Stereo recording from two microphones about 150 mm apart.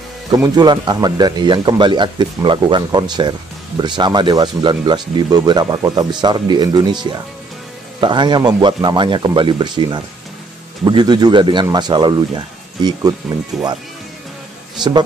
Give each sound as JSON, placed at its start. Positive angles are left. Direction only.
{"t": 0.3, "sound": "speech", "side_deg": -25}
{"t": 13.3, "sound": "speech", "side_deg": 0}
{"t": 14.8, "sound": "speech", "side_deg": -30}